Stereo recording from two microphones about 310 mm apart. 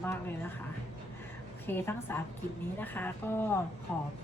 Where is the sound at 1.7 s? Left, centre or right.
Centre.